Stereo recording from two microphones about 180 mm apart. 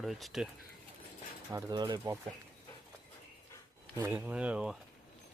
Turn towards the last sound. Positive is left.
turn(degrees=-5)  # may be behind; listen again after turning